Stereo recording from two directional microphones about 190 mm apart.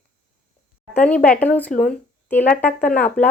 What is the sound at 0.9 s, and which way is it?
Speech, 10° left (ahead or behind).